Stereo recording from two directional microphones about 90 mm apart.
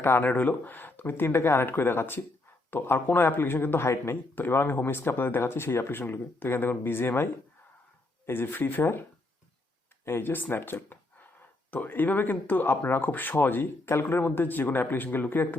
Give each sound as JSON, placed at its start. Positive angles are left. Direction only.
{"t": 0.0, "sound": "a man's voice", "side_deg": 25}
{"t": 8.3, "sound": "a man's voice", "side_deg": 25}
{"t": 10.1, "sound": "a man's voice", "side_deg": 25}